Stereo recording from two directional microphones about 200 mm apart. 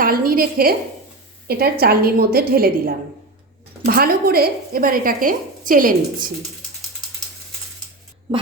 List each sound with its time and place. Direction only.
0.0 s a woman's voice: 45° right (ahead or behind)